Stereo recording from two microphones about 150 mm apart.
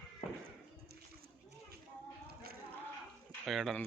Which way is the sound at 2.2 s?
90° right.